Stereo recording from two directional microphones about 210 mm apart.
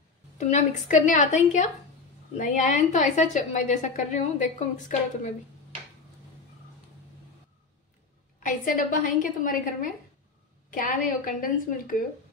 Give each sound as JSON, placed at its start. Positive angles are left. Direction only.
{"t": 0.4, "sound": "a woman's voice", "side_deg": 35}
{"t": 8.4, "sound": "a woman's voice", "side_deg": 40}